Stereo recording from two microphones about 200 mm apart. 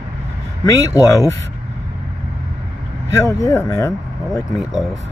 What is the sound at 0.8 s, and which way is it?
Speech, 15° left (ahead or behind).